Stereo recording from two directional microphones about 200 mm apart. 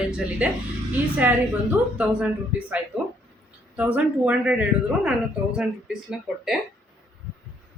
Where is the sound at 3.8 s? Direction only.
5° right (ahead or behind).